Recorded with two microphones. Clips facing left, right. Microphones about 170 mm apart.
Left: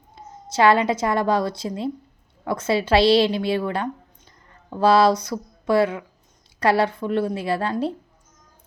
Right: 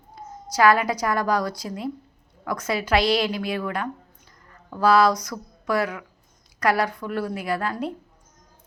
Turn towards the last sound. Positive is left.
turn(degrees=30)  # may be behind; listen again after turning